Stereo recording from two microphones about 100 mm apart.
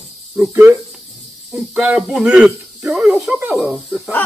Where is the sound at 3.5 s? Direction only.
5° right (ahead or behind).